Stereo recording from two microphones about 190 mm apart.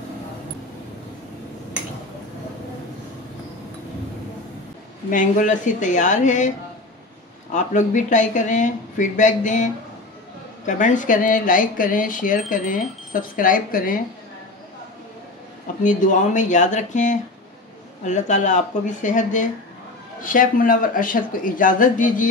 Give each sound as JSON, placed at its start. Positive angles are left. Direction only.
{"t": 5.1, "sound": "speech", "side_deg": 40}
{"t": 7.5, "sound": "speech", "side_deg": 40}
{"t": 15.8, "sound": "speech", "side_deg": 40}